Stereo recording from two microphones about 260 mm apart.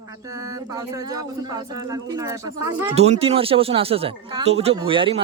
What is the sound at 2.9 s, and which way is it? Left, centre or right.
Speech, right.